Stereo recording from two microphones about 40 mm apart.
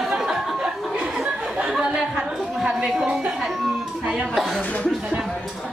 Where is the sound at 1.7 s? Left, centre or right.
Centre.